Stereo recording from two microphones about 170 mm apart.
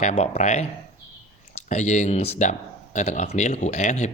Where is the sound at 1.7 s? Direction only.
45° left (ahead or behind).